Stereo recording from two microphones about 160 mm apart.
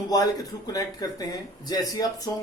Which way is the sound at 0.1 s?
25° left (ahead or behind).